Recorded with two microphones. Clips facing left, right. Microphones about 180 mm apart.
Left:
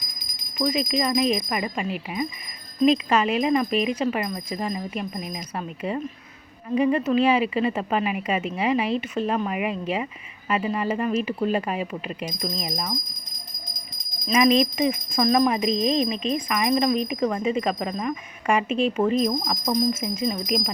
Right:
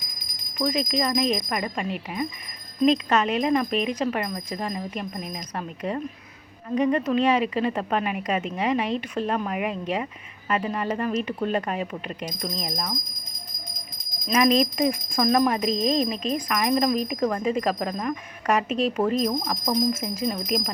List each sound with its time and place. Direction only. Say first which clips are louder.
0.6 s speech: left 1 dB; centre (ahead or behind)
14.3 s speech: left 1 dB; centre (ahead or behind)
19.3 s speech: left 1 dB; 5° right (ahead or behind)